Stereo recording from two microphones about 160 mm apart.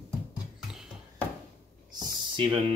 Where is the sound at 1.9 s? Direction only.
30° right (ahead or behind).